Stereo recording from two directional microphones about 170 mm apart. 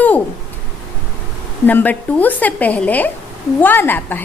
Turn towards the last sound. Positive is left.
turn(degrees=10)  # may be behind; listen again after turning